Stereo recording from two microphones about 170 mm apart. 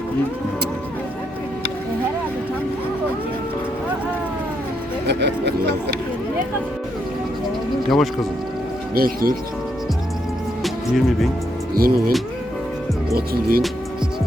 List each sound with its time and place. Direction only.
5.0 s speech: 85° right
7.9 s speech: centre (ahead or behind)
9.0 s speech: 60° right (ahead or behind)
10.6 s music: centre (ahead or behind)
11.7 s speech: 60° right (ahead or behind)
13.1 s speech: 60° right (ahead or behind)